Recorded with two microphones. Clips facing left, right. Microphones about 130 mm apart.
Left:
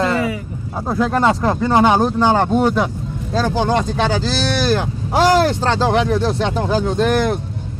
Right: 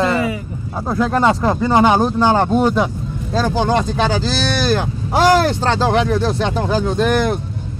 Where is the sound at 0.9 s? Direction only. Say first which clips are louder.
Even; 10° left (ahead or behind).